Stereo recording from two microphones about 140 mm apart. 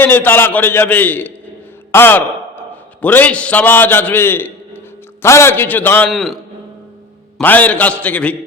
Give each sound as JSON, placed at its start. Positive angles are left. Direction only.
{"t": 0.0, "sound": "a man's voice", "side_deg": 15}
{"t": 6.1, "sound": "a man's voice", "side_deg": 0}
{"t": 7.4, "sound": "a man's voice", "side_deg": 10}